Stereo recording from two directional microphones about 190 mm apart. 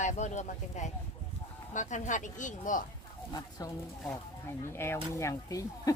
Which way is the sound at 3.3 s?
20° left (ahead or behind).